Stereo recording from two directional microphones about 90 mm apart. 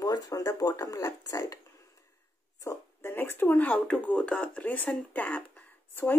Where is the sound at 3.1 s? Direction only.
25° left (ahead or behind).